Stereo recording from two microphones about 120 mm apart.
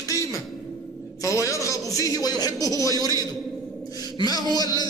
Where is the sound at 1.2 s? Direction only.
25° left (ahead or behind).